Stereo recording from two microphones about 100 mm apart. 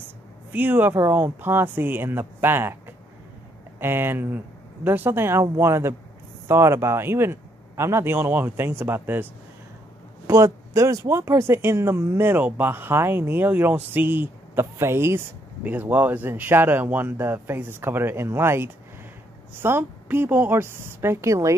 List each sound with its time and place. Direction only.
0.5 s speech: 20° right (ahead or behind)
3.8 s speech: 20° right (ahead or behind)